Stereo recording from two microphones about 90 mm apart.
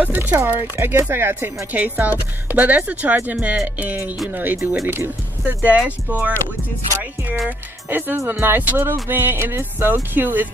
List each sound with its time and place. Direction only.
0.0 s speech: 20° right (ahead or behind)
7.4 s speech: 20° right (ahead or behind)